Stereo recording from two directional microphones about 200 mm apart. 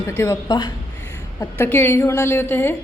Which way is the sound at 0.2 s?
15° left (ahead or behind).